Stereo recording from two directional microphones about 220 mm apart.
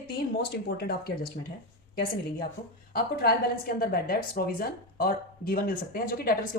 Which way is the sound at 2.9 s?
45° left (ahead or behind).